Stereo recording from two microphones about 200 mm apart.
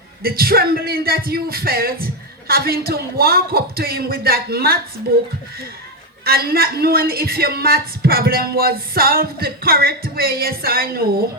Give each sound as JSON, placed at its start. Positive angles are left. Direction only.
{"t": 0.2, "sound": "speech", "side_deg": -50}